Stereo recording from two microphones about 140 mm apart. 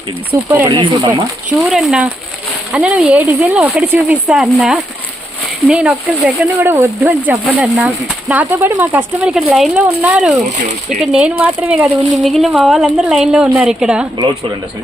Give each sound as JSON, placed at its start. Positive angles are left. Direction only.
{"t": 0.4, "sound": "speech", "side_deg": -15}
{"t": 0.7, "sound": "speech", "side_deg": -35}
{"t": 1.5, "sound": "a woman's voice", "side_deg": -5}
{"t": 10.7, "sound": "speech", "side_deg": -60}
{"t": 11.1, "sound": "speech", "side_deg": -10}
{"t": 12.2, "sound": "a woman's voice", "side_deg": 0}